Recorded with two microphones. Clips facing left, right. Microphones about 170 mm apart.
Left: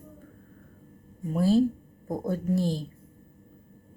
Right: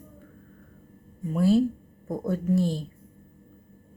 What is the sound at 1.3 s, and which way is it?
Speech, 35° left (ahead or behind).